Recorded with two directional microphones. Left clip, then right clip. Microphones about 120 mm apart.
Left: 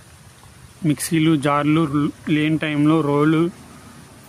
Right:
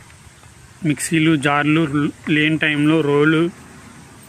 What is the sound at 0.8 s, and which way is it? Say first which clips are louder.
Speech: right 2 dB; 20° left (ahead or behind).